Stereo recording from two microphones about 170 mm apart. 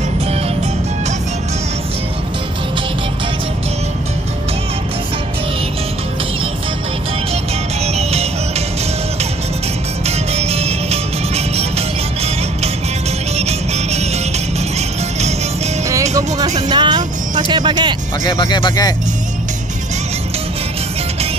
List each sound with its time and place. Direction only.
7.8 s music: 40° right (ahead or behind)
10.0 s music: 40° right (ahead or behind)
13.4 s music: 40° right (ahead or behind)
15.1 s music: 40° right (ahead or behind)
16.6 s music: 25° right (ahead or behind)
18.2 s a sound: 25° left (ahead or behind)